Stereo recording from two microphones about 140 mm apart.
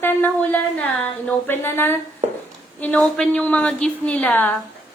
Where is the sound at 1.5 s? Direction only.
15° left (ahead or behind).